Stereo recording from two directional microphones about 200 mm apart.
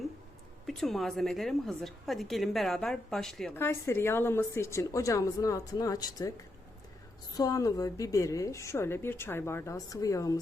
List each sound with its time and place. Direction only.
0.7 s a woman's voice: centre (ahead or behind); by 10.4 s 15° left (ahead or behind)